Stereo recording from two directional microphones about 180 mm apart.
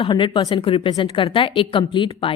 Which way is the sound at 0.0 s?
25° left (ahead or behind).